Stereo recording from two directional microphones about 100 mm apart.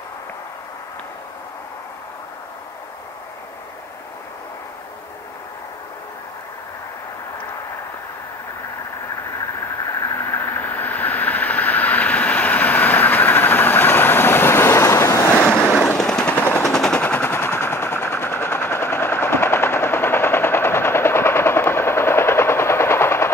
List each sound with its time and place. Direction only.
10.3 s vehicle: 20° left (ahead or behind)
15.5 s machine gun: 10° left (ahead or behind)
16.4 s machine gun: 25° left (ahead or behind)
16.7 s machine gun: 5° left (ahead or behind); by 23.3 s 25° left (ahead or behind)